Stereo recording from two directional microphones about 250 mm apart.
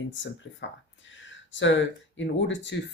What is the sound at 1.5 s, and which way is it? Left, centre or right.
Speech, left.